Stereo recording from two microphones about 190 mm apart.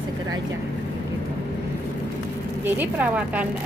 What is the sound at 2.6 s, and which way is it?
Speech, 10° right (ahead or behind).